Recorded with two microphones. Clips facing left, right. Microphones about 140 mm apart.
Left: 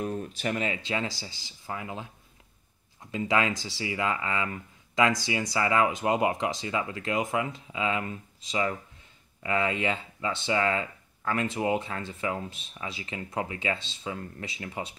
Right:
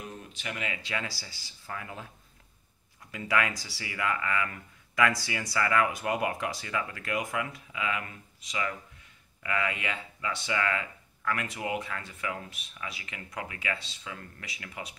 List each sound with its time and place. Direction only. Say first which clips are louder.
0.0 s speech: left 10 dB; 45° left (ahead or behind); by 2.0 s 20° left (ahead or behind)
3.1 s speech: left 3 dB; 25° left (ahead or behind)